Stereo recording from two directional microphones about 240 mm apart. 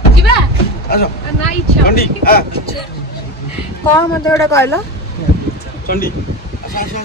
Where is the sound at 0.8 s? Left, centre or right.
Left.